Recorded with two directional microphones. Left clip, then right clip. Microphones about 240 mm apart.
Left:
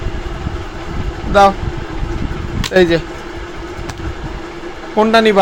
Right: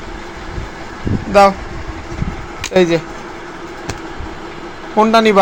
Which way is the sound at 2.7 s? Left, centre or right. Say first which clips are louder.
Left 1 dB; centre.